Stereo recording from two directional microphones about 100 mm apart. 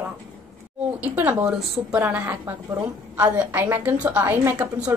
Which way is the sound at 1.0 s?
20° right (ahead or behind).